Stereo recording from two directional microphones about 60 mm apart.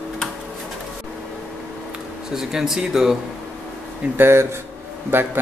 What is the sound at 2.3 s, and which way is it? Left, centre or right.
Speech, centre.